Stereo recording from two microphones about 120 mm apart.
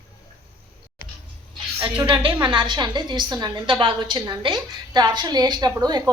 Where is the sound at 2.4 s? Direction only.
40° right (ahead or behind).